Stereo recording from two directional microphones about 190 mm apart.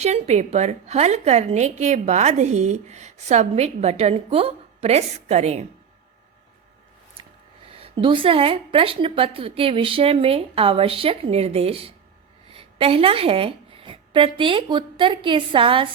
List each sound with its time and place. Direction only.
0.0 s a woman's voice: 35° right (ahead or behind)
7.7 s a woman's voice: 30° right (ahead or behind)